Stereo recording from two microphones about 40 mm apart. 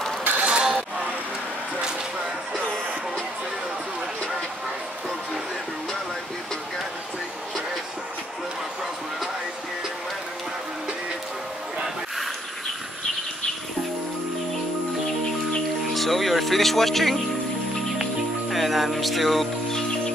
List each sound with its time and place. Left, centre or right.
0.4 s a sound: right
15.9 s speech: centre
18.5 s music: centre